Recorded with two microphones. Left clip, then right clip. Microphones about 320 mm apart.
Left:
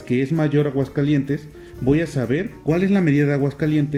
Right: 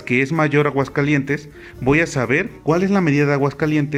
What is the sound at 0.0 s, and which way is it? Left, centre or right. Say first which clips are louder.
Speech: right 4 dB; right.